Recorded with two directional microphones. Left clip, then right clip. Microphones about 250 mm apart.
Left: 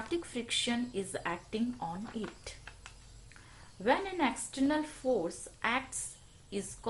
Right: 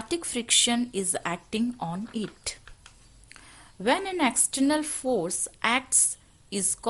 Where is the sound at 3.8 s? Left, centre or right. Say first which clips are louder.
Right 5 dB; right.